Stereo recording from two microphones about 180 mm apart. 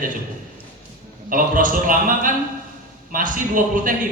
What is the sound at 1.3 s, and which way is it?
A man's voice, 50° right (ahead or behind).